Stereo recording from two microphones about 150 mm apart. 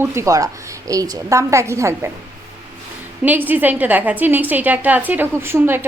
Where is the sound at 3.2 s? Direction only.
10° right (ahead or behind).